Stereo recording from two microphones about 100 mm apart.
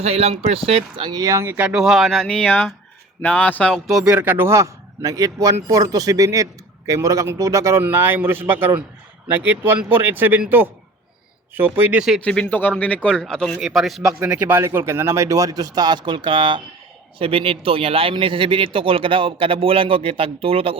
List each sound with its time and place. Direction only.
0.0 s speech: 90° right; by 1.1 s 60° right (ahead or behind)
1.1 s a man's voice: 35° right (ahead or behind)
1.7 s a man's voice: 5° right (ahead or behind); by 3.8 s 15° left (ahead or behind)
3.8 s speech: 5° right (ahead or behind)
4.2 s a man's voice: 20° right (ahead or behind)
11.5 s speech: 20° right (ahead or behind)
12.2 s a man's voice: 10° left (ahead or behind)
14.3 s a man's voice: 15° right (ahead or behind); by 16.6 s 55° right (ahead or behind)
17.2 s a man's voice: 65° right (ahead or behind)